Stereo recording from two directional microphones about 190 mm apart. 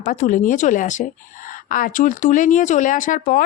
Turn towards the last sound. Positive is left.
turn(degrees=45)  # may be behind; listen again after turning